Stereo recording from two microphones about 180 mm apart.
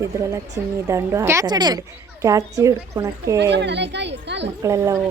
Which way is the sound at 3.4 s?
70° right (ahead or behind).